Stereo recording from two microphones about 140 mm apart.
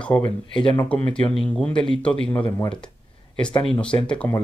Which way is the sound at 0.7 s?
10° left (ahead or behind).